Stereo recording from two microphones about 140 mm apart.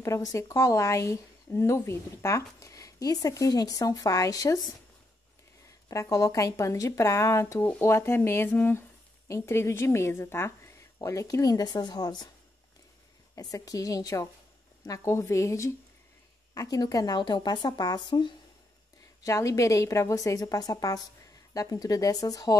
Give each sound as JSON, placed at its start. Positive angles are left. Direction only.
{"t": 0.0, "sound": "speech", "side_deg": 20}
{"t": 5.9, "sound": "speech", "side_deg": 25}
{"t": 13.3, "sound": "speech", "side_deg": 25}